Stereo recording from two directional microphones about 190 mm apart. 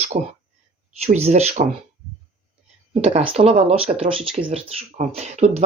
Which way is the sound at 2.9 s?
30° right (ahead or behind).